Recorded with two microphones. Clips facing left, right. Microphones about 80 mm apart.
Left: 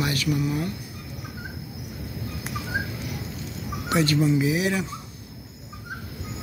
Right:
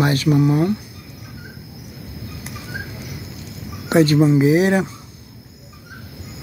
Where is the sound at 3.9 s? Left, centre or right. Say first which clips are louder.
Right 8 dB; right.